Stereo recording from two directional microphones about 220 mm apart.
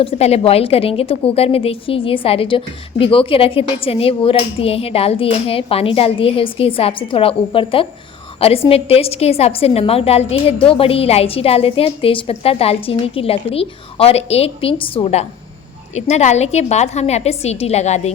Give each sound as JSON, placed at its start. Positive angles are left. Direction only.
{"t": 0.0, "sound": "a woman's voice", "side_deg": 25}